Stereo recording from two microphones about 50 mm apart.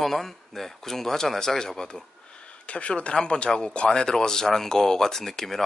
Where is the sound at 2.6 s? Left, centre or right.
Left.